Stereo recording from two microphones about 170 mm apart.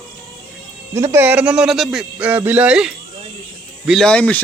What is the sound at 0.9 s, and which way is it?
A man's voice, 15° right (ahead or behind).